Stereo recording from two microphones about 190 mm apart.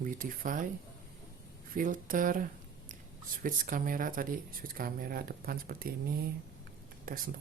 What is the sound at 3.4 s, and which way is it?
Speech, 45° right (ahead or behind).